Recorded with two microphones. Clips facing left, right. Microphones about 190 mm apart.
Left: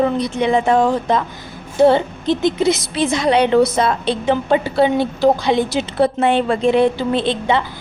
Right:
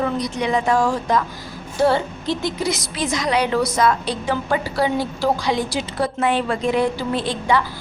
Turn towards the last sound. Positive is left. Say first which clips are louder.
# left 3 dB
turn(degrees=25)  # may be behind; listen again after turning